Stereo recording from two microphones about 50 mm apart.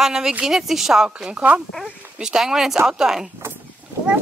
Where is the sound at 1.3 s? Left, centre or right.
Right.